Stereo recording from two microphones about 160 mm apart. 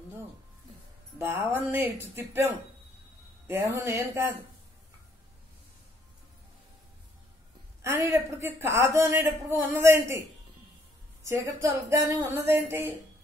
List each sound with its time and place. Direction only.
1.1 s a woman's voice: 15° right (ahead or behind)
7.8 s a woman's voice: 15° right (ahead or behind)
11.2 s a woman's voice: 20° right (ahead or behind)